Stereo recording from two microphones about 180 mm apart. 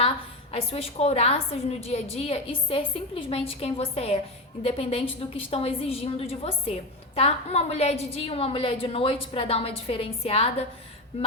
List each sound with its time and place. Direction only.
0.5 s a woman's voice: 35° left (ahead or behind)